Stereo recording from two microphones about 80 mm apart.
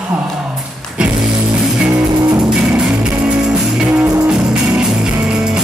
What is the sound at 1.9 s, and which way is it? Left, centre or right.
Music, right.